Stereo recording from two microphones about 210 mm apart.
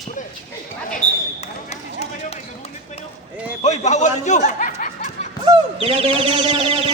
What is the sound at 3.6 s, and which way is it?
Speech, 35° left (ahead or behind).